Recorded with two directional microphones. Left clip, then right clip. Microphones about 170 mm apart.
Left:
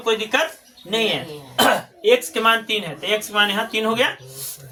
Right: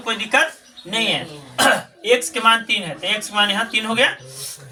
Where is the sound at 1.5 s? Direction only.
20° left (ahead or behind).